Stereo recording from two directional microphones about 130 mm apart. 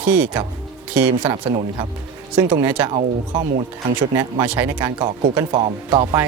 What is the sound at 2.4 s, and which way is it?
Speech, 15° right (ahead or behind).